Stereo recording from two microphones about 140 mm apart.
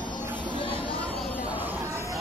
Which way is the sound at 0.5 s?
40° left (ahead or behind).